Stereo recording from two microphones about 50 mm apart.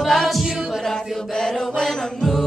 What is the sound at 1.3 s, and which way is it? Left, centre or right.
Chant, centre.